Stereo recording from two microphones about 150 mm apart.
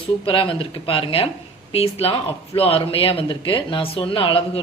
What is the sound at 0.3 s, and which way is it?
A woman's voice, 35° left (ahead or behind).